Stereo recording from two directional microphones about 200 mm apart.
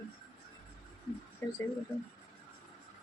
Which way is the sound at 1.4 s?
10° left (ahead or behind).